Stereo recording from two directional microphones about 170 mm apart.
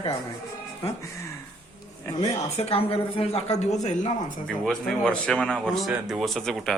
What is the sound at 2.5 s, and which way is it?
Speech, 35° left (ahead or behind).